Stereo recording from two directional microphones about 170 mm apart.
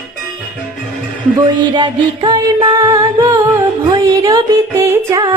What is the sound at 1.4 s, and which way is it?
Music, 25° right (ahead or behind).